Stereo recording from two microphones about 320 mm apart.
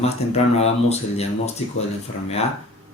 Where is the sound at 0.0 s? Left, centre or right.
Centre.